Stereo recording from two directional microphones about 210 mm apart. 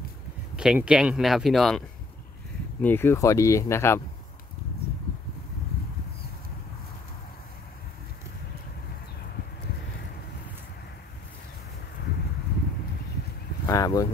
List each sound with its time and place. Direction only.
0.6 s speech: 5° right (ahead or behind); by 4.0 s 10° left (ahead or behind)
13.7 s speech: 15° left (ahead or behind)